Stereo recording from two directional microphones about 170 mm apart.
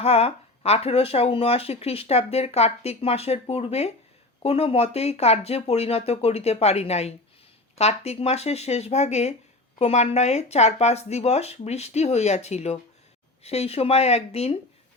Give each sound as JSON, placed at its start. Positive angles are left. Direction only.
{"t": 0.0, "sound": "speech", "side_deg": 35}